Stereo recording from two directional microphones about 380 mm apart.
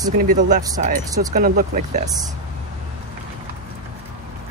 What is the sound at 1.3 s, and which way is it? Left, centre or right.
Speech, right.